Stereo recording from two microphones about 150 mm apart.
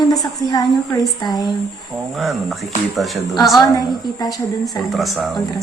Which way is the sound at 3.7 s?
25° left (ahead or behind).